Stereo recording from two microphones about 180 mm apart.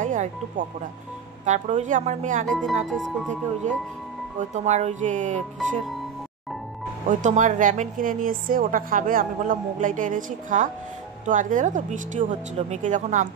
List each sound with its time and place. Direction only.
0.0 s a woman's voice: 45° right (ahead or behind)
2.4 s speech: centre (ahead or behind)
4.4 s speech: 40° right (ahead or behind)
7.1 s a woman's voice: 45° right (ahead or behind)